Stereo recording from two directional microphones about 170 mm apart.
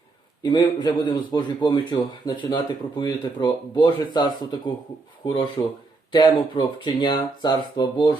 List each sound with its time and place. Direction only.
0.4 s speech: 25° left (ahead or behind)